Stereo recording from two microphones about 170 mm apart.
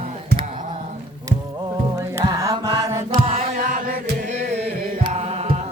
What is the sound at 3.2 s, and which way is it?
Chant, 35° right (ahead or behind).